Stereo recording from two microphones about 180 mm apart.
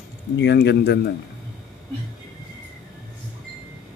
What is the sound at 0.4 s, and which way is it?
Speech, 70° left (ahead or behind).